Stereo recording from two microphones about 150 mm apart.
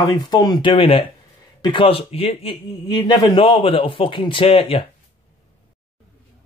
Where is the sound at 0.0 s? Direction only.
30° left (ahead or behind).